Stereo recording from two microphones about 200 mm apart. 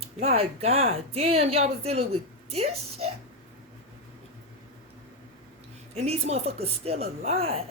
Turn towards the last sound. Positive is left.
turn(degrees=-30)  # may be behind; listen again after turning